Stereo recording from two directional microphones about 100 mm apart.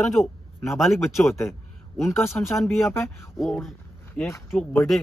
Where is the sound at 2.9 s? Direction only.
25° left (ahead or behind).